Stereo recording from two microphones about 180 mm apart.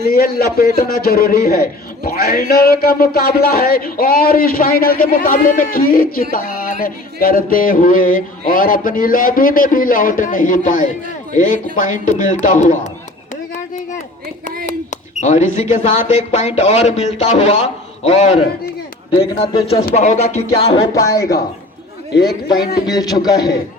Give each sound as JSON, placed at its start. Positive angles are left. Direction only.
{"t": 0.1, "sound": "speech", "side_deg": 55}
{"t": 2.0, "sound": "a sound", "side_deg": 55}
{"t": 15.2, "sound": "speech", "side_deg": 40}
{"t": 19.9, "sound": "speech", "side_deg": 40}
{"t": 20.9, "sound": "speech", "side_deg": 15}
{"t": 22.1, "sound": "speech", "side_deg": 60}
{"t": 22.9, "sound": "speech", "side_deg": 20}